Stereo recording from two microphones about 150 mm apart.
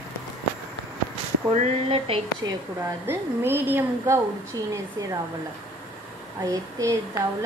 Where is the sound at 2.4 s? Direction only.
25° right (ahead or behind).